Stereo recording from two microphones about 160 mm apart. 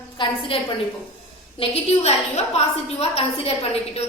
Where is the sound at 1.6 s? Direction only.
40° left (ahead or behind).